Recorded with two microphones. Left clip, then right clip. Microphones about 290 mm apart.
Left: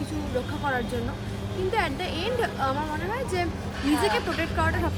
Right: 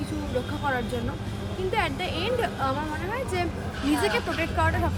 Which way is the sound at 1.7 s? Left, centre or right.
Centre.